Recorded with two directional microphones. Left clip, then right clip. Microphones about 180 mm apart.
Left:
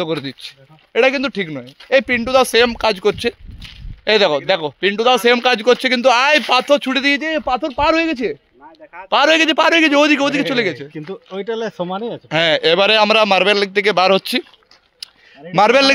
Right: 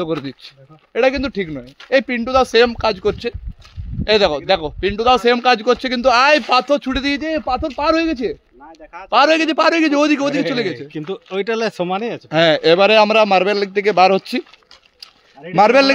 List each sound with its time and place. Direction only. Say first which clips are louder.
0.0 s speech: left 1 dB; 10° left (ahead or behind)
4.0 s speech: left 1 dB; 40° left (ahead or behind)
10.9 s speech: right 3 dB; 65° right (ahead or behind)
11.5 s speech: right 2 dB; 15° right (ahead or behind)
12.0 s a man's voice: right 1 dB; 10° left (ahead or behind)
15.5 s a man's voice: even; centre (ahead or behind)